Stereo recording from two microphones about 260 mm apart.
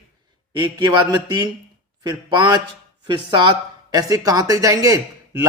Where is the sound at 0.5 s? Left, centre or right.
Centre.